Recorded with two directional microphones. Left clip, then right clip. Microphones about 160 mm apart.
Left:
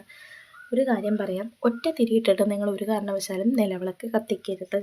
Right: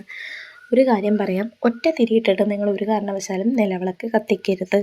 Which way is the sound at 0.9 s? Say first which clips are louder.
Right 6 dB; 15° right (ahead or behind).